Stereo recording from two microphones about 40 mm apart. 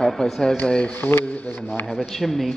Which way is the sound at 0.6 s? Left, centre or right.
Left.